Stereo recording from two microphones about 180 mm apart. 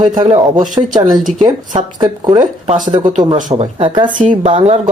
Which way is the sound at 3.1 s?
40° right (ahead or behind).